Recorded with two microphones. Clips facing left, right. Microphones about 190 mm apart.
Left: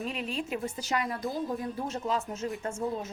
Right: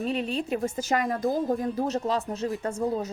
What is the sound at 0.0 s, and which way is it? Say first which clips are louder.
A woman's voice: right 6 dB; 35° right (ahead or behind).